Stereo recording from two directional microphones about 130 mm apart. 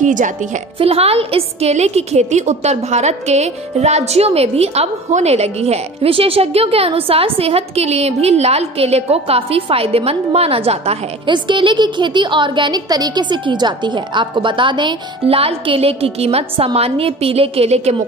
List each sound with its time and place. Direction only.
0.0 s a woman's voice: 75° right (ahead or behind)
0.7 s a woman's voice: 50° right (ahead or behind)
11.2 s a woman's voice: 35° right (ahead or behind); by 17.9 s 55° right (ahead or behind)